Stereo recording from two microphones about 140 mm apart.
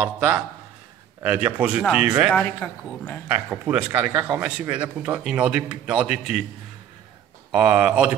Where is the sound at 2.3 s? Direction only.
10° left (ahead or behind).